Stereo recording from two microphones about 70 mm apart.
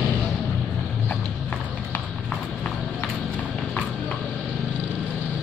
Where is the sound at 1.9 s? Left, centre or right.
Left.